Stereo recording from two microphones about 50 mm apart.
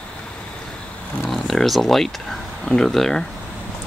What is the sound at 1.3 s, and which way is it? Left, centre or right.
Speech, centre.